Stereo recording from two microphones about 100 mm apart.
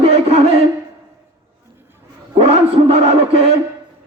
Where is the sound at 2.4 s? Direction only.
80° right.